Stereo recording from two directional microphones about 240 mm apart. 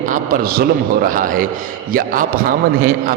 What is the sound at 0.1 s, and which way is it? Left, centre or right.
A man's voice, right.